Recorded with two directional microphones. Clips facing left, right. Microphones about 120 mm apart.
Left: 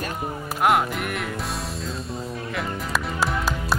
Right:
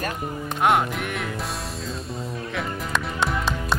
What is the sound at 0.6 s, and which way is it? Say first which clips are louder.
Music: even; centre (ahead or behind).